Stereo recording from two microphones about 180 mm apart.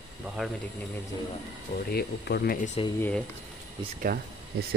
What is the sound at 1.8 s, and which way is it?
Speech, 60° left (ahead or behind).